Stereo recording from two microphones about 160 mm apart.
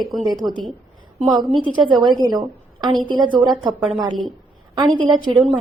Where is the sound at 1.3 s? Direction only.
25° right (ahead or behind).